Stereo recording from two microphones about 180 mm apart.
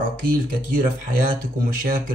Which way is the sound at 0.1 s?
50° right (ahead or behind).